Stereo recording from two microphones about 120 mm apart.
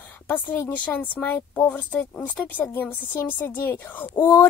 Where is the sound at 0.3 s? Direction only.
15° left (ahead or behind).